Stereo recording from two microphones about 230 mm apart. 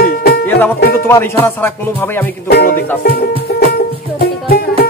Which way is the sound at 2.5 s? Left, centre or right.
Left.